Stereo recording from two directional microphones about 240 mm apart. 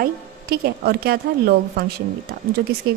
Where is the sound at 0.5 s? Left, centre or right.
Right.